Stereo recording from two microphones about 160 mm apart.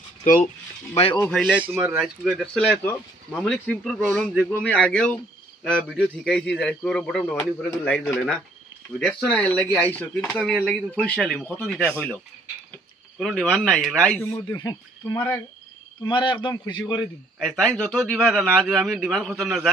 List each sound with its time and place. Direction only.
1.2 s speech: 10° left (ahead or behind)
13.2 s speech: centre (ahead or behind)
14.2 s speech: 20° left (ahead or behind)
16.0 s a man's voice: 30° left (ahead or behind)
17.4 s speech: 5° left (ahead or behind)